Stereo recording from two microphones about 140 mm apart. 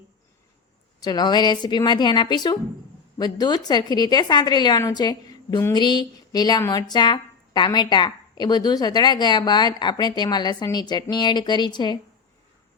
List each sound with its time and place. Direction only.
0.9 s a woman's voice: 30° left (ahead or behind)